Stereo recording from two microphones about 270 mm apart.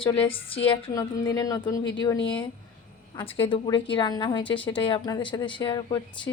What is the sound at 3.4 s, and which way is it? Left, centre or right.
A woman's voice, centre.